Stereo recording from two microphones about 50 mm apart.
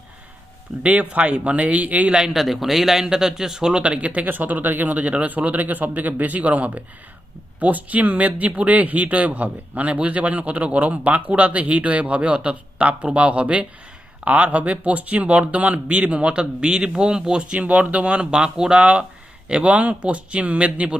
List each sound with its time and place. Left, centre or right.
0.8 s speech: right
2.1 s speech: centre; by 20.9 s right